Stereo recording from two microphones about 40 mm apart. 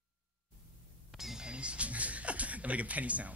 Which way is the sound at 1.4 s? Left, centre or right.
Right.